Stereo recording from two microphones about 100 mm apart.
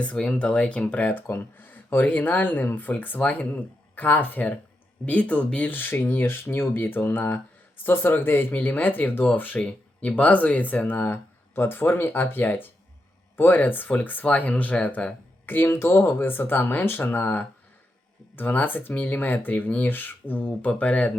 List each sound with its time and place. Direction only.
0.0 s speech: 10° left (ahead or behind)